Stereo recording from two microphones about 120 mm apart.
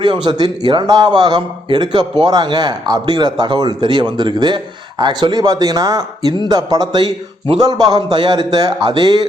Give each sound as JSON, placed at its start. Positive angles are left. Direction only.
{"t": 0.0, "sound": "a man's voice", "side_deg": -40}